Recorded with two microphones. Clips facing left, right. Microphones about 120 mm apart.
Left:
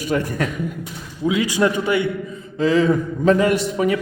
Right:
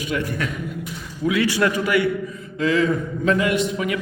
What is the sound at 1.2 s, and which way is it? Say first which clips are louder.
A man's voice: left 1 dB; 15° left (ahead or behind).